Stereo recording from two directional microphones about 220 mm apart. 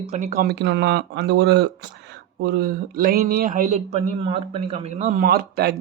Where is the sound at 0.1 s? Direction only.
35° right (ahead or behind).